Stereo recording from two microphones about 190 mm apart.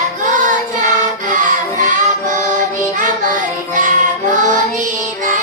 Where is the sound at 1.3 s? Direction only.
40° right (ahead or behind).